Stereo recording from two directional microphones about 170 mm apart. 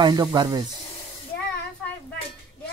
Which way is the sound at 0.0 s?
25° right (ahead or behind).